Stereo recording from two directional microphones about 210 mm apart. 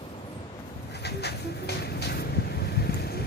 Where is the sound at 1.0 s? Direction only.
50° left (ahead or behind).